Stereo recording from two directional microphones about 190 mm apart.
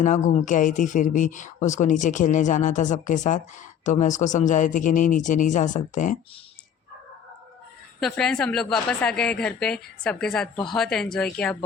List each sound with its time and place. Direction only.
0.0 s speech: 40° left (ahead or behind)
8.0 s a woman's voice: 5° left (ahead or behind)